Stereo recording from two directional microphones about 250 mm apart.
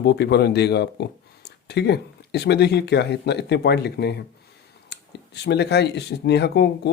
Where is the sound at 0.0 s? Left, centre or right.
Left.